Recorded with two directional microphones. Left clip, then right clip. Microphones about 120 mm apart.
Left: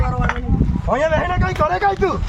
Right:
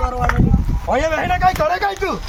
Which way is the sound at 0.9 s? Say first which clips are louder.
Even; 15° left (ahead or behind).